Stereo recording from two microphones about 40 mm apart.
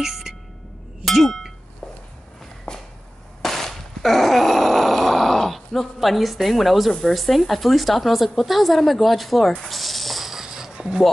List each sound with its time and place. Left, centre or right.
0.0 s speech: centre
1.2 s a sound: centre
2.7 s a sound: centre
3.4 s groan: centre
7.0 s a woman's voice: centre
9.6 s snake: centre